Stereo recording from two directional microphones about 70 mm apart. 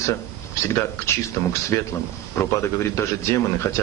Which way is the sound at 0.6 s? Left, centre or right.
Left.